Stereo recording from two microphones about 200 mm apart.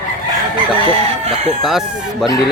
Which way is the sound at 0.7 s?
30° right (ahead or behind).